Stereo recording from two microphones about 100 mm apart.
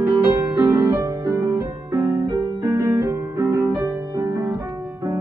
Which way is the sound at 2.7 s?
35° right (ahead or behind).